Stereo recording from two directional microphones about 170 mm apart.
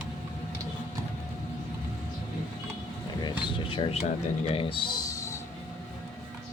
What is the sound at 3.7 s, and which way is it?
Speech, 35° left (ahead or behind).